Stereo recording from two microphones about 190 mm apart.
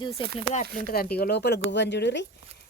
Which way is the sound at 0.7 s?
50° left (ahead or behind).